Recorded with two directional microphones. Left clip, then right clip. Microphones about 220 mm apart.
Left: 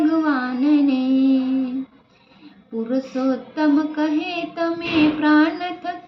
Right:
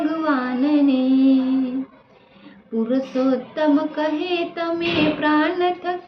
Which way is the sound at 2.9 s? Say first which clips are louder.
Right 2 dB; 10° right (ahead or behind).